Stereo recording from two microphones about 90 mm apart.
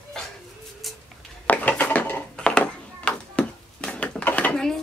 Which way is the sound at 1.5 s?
20° left (ahead or behind).